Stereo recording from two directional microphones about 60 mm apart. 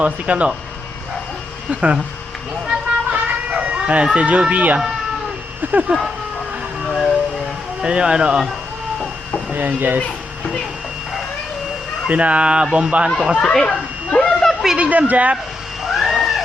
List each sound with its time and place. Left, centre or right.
0.0 s speech: right
1.7 s speech: right
2.6 s a sound: centre
3.6 s speech: right
5.9 s speech: centre
6.9 s a sound: centre
7.8 s speech: centre
9.6 s speech: right
12.0 s speech: right
13.4 s a sound: centre
14.8 s speech: right
15.8 s cat: centre